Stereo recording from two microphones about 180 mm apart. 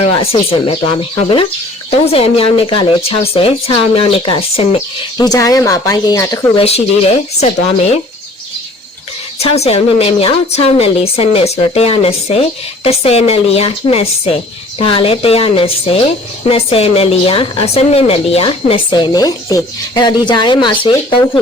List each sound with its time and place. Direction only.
0.0 s a woman's voice: 35° left (ahead or behind)
6.6 s a woman's voice: 35° left (ahead or behind)
9.4 s a woman's voice: 35° left (ahead or behind)